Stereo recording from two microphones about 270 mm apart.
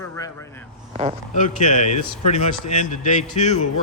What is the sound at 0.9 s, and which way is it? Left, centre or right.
Speech, right.